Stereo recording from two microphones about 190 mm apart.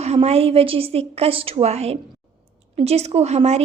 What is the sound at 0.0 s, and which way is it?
A woman's voice, 35° right (ahead or behind).